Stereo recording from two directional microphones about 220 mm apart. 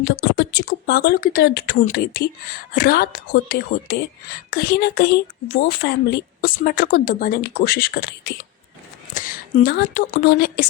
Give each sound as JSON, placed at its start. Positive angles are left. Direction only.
{"t": 0.0, "sound": "speech", "side_deg": 50}